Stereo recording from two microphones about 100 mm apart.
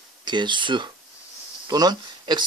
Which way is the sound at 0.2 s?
50° right (ahead or behind).